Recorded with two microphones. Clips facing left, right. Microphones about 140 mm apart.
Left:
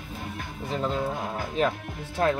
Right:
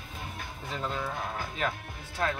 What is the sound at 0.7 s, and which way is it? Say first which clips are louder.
Speech: left 6 dB; 30° left (ahead or behind).